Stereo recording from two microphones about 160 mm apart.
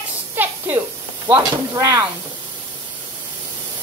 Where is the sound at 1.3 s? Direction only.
20° right (ahead or behind).